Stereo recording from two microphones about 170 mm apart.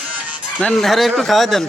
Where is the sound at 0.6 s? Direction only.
Centre (ahead or behind).